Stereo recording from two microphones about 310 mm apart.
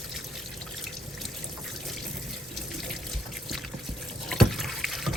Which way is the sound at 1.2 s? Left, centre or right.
Centre.